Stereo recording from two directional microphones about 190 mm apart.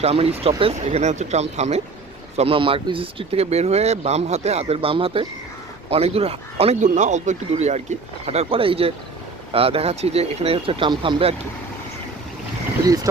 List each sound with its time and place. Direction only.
0.0 s speech: 30° right (ahead or behind)